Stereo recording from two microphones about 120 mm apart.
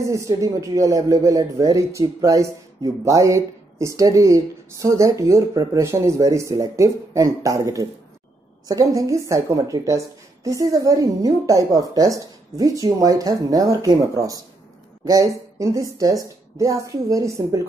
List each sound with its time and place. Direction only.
0.1 s speech: 25° right (ahead or behind)